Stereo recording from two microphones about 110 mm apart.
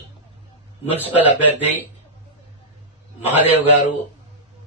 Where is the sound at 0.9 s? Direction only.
15° right (ahead or behind).